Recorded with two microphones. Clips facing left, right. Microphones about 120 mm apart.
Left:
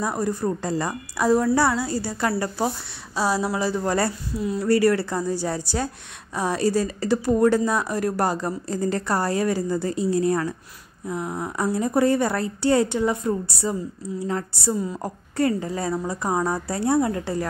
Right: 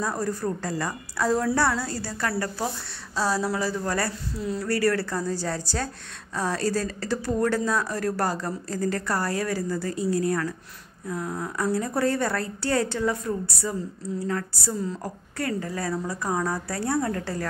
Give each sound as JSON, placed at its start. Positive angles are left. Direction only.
{"t": 0.0, "sound": "speech", "side_deg": 15}